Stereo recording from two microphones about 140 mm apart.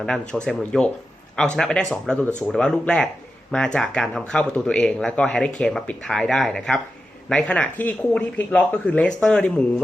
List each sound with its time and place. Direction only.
0.0 s speech: 5° left (ahead or behind)